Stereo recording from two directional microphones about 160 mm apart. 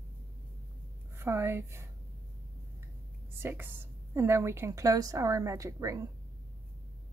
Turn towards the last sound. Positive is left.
turn(degrees=-20)  # may be behind; listen again after turning